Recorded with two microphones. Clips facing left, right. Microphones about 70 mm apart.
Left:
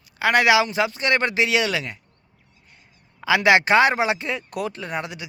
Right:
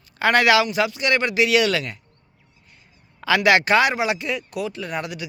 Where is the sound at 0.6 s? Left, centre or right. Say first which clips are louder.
Right 1 dB; left.